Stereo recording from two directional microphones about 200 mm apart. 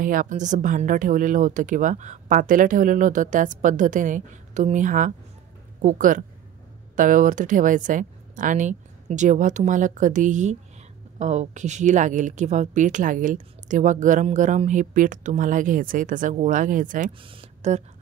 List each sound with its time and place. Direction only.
0.0 s speech: 45° right (ahead or behind)
17.2 s speech: 25° right (ahead or behind)